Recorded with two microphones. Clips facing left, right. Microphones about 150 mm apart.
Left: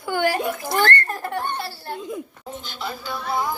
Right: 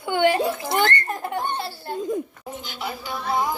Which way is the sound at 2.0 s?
40° right (ahead or behind).